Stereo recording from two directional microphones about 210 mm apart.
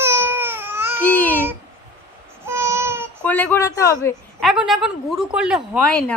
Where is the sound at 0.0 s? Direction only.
10° right (ahead or behind).